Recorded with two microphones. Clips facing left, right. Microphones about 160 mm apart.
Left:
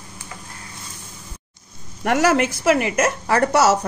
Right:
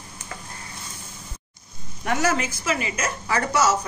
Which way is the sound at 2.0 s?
70° left (ahead or behind).